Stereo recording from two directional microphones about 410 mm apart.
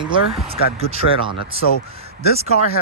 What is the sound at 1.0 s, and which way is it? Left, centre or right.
Speech, left.